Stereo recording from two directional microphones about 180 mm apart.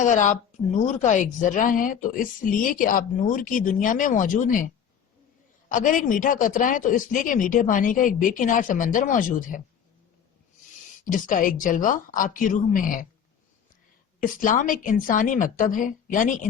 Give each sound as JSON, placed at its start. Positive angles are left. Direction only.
{"t": 0.0, "sound": "a woman's voice", "side_deg": 45}
{"t": 11.0, "sound": "a woman's voice", "side_deg": 50}
{"t": 14.2, "sound": "a woman's voice", "side_deg": 50}